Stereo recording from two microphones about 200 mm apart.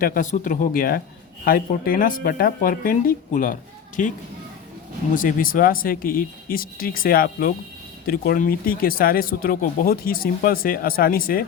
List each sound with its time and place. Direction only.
0.0 s speech: 45° left (ahead or behind)
5.1 s speech: 45° left (ahead or behind)